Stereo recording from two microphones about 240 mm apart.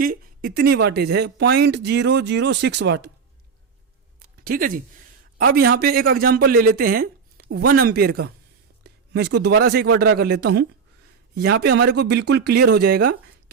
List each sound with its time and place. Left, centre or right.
0.0 s speech: right
4.2 s a sound: right
5.4 s a man's voice: right